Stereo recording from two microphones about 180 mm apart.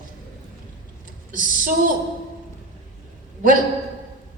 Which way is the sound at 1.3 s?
50° right (ahead or behind).